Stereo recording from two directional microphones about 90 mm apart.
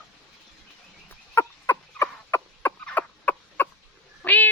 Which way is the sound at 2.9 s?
20° left (ahead or behind).